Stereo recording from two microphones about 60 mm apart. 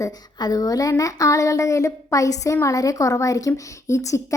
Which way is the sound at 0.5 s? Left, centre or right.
Left.